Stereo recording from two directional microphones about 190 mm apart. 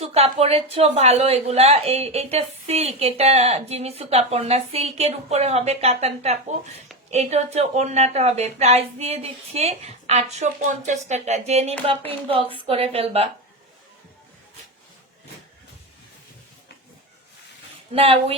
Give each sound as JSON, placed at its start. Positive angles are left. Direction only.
{"t": 0.0, "sound": "a woman's voice", "side_deg": -30}
{"t": 17.9, "sound": "speech", "side_deg": -30}